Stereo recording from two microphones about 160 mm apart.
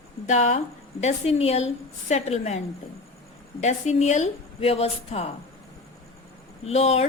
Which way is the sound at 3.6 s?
45° left (ahead or behind).